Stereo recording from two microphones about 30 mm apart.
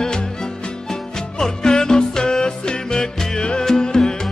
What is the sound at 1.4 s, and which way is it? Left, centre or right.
Music, left.